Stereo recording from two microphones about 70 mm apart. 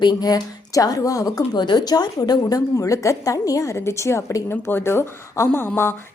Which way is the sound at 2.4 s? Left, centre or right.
Left.